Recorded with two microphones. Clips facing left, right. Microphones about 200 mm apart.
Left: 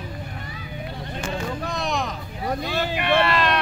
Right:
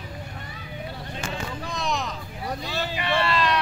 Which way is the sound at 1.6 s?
55° left (ahead or behind).